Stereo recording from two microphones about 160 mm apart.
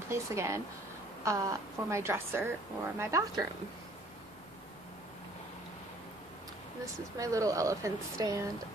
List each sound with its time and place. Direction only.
0.1 s speech: 20° right (ahead or behind)
7.2 s speech: 20° right (ahead or behind)